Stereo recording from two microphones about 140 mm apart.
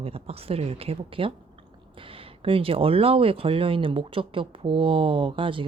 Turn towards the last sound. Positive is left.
turn(degrees=-40)  # may be behind; listen again after turning